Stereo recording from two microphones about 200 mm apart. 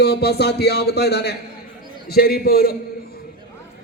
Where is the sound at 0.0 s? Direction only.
55° left (ahead or behind).